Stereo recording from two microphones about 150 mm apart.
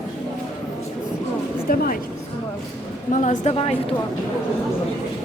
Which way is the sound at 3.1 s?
55° left (ahead or behind).